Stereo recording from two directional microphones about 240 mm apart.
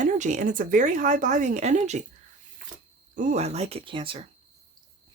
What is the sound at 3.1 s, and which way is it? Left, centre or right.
Speech, right.